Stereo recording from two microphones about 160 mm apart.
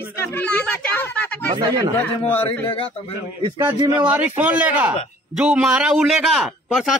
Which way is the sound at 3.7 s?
25° right (ahead or behind).